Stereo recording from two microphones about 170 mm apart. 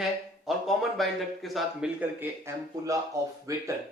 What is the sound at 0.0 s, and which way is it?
Speech, centre (ahead or behind).